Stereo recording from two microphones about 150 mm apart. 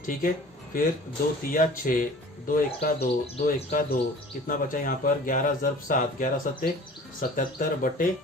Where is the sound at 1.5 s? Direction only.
65° left (ahead or behind).